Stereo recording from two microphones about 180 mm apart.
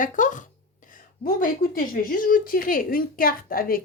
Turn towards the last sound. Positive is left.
turn(degrees=55)  # may be behind; listen again after turning